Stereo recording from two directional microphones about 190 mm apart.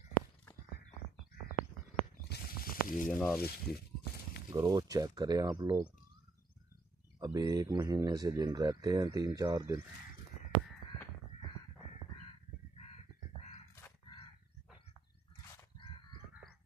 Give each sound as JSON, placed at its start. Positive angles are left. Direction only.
{"t": 2.2, "sound": "a sound", "side_deg": 50}
{"t": 3.1, "sound": "speech", "side_deg": 0}
{"t": 3.3, "sound": "speech", "side_deg": 55}
{"t": 4.5, "sound": "speech", "side_deg": -15}
{"t": 7.2, "sound": "speech", "side_deg": -20}